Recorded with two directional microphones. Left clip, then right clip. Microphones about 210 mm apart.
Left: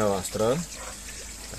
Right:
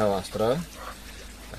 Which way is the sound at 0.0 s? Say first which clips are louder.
Even; 25° left (ahead or behind).